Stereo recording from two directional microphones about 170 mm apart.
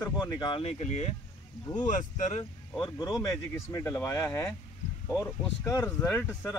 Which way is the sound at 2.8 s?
25° left (ahead or behind).